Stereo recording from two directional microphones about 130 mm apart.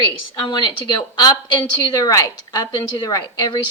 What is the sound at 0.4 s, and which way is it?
A woman's voice, 40° left (ahead or behind).